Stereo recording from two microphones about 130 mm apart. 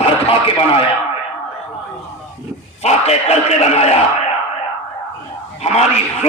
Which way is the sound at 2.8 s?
55° left (ahead or behind).